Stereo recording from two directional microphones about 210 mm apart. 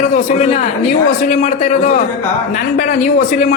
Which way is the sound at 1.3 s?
35° left (ahead or behind).